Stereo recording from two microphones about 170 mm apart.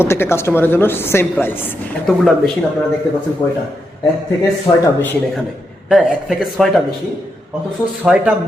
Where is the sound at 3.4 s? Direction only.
25° left (ahead or behind).